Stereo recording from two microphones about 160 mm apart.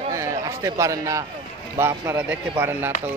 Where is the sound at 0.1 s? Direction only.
20° right (ahead or behind).